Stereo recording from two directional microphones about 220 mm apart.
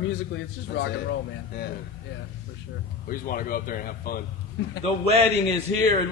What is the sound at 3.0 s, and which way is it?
Speech, 40° left (ahead or behind).